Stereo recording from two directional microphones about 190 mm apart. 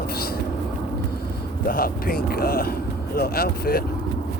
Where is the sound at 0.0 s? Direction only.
55° left (ahead or behind).